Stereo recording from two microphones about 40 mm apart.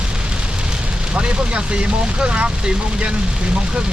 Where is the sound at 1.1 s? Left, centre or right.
Right.